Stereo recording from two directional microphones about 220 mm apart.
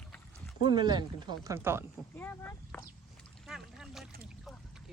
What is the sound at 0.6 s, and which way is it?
Speech, 20° right (ahead or behind).